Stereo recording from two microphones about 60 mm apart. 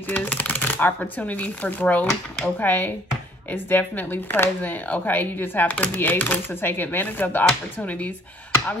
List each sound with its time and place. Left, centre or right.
0.1 s speech: left